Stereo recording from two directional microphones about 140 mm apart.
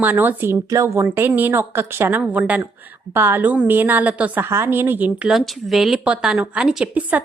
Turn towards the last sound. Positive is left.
turn(degrees=-10)  # may be behind; listen again after turning